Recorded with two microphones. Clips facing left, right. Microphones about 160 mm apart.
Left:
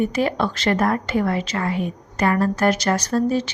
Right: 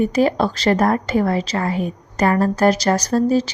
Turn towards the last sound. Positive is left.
turn(degrees=-35)  # may be behind; listen again after turning